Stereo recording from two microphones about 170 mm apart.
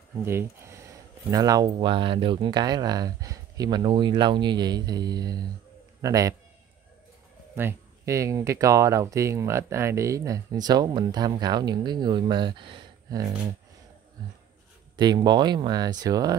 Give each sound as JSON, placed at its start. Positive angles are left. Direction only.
{"t": 0.2, "sound": "speech", "side_deg": -15}
{"t": 7.5, "sound": "speech", "side_deg": -15}
{"t": 15.0, "sound": "speech", "side_deg": -25}